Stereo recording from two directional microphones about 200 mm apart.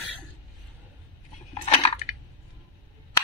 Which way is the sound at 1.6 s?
30° left (ahead or behind).